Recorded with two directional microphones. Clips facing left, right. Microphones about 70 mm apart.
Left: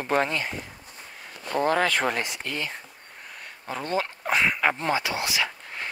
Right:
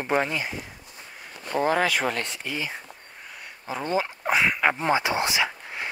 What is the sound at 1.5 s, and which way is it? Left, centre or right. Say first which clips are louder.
Speech: even; centre.